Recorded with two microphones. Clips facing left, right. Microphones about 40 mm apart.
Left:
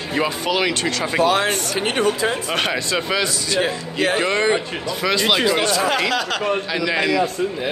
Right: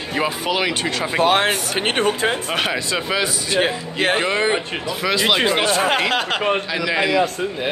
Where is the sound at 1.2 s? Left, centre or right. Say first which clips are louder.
Right 1 dB; right.